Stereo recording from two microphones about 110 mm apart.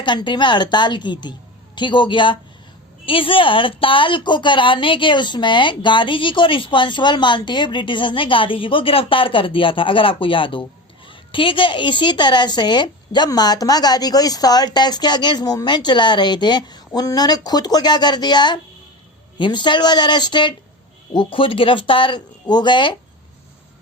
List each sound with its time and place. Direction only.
0.0 s a woman's voice: 45° left (ahead or behind)